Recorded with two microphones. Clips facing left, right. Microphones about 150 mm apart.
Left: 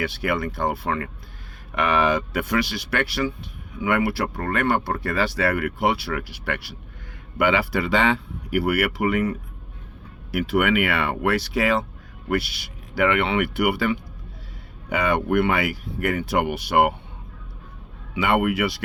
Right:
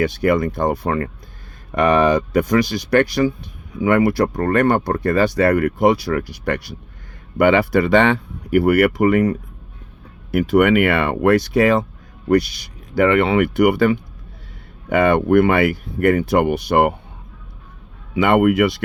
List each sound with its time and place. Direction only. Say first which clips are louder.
0.0 s speech: right 8 dB; 45° right (ahead or behind)
10.3 s speech: right 7 dB; 45° right (ahead or behind)
18.1 s speech: right 7 dB; 50° right (ahead or behind)